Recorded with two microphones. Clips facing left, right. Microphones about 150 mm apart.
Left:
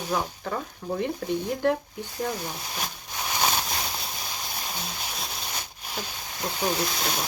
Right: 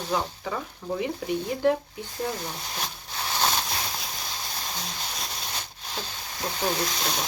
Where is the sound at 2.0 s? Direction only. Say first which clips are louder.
Left 1 dB; 10° left (ahead or behind).